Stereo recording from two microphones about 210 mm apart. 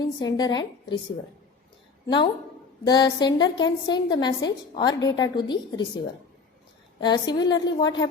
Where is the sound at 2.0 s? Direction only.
20° left (ahead or behind).